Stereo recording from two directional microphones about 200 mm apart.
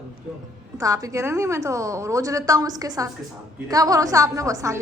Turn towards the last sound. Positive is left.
turn(degrees=-15)  # may be behind; listen again after turning